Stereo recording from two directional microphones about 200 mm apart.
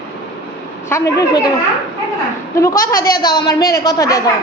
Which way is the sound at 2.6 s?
15° left (ahead or behind).